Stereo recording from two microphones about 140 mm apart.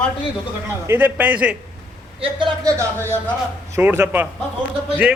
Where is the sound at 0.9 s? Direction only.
15° right (ahead or behind).